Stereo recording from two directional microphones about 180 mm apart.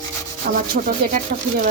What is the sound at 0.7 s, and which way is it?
Speech, 45° right (ahead or behind).